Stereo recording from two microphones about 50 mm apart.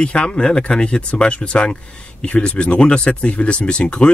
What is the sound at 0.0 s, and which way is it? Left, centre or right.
Speech, left.